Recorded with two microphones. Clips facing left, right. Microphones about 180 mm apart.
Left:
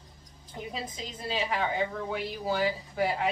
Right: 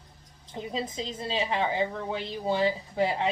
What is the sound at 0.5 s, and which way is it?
A woman's voice, 25° right (ahead or behind).